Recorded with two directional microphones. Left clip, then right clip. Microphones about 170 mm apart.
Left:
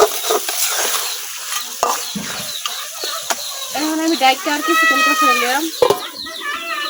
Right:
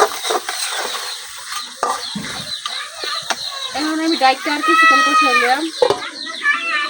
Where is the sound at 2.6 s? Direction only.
10° left (ahead or behind).